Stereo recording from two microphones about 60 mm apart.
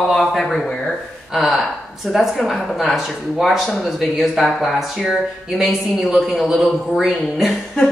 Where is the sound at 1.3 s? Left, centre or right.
Centre.